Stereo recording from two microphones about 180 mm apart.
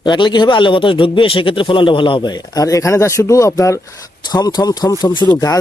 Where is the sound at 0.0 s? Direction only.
25° left (ahead or behind).